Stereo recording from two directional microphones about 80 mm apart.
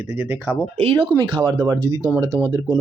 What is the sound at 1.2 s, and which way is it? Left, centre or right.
Speech, right.